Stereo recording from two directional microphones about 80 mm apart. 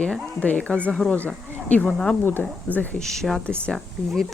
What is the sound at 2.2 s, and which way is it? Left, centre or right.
Speech, left.